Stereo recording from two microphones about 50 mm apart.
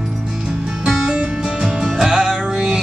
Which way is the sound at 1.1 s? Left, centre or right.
Right.